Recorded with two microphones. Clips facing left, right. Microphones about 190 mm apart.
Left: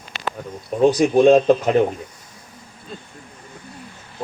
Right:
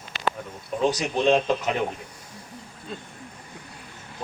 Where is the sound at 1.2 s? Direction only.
50° left (ahead or behind).